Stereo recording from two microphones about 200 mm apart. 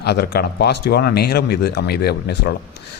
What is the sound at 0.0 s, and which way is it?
Speech, 55° left (ahead or behind).